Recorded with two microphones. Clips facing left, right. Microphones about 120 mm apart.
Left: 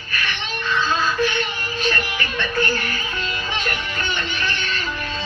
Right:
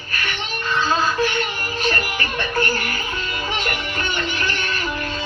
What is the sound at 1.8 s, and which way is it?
Music, 40° right (ahead or behind).